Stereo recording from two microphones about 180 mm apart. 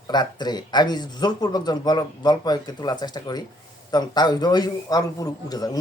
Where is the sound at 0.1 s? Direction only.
25° left (ahead or behind).